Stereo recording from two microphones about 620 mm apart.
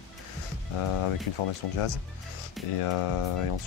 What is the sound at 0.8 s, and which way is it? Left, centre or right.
Speech, left.